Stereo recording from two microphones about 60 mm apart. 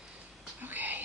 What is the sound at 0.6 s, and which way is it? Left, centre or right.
Whispering, right.